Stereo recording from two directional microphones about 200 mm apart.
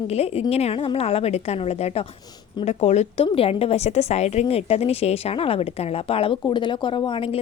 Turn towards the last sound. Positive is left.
turn(degrees=25)  # may be behind; listen again after turning